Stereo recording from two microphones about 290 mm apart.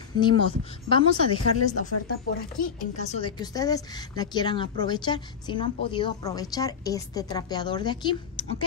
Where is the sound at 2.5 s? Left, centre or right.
Left.